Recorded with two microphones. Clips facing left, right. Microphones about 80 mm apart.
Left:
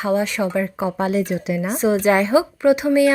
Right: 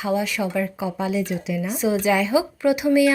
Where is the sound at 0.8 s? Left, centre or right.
Left.